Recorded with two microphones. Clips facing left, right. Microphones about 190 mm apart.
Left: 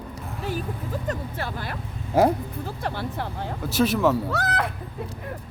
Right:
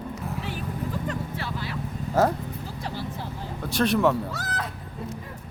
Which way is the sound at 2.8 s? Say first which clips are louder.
Left 4 dB; 60° left (ahead or behind).